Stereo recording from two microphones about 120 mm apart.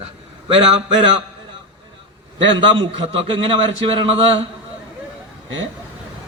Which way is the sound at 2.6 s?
45° right (ahead or behind).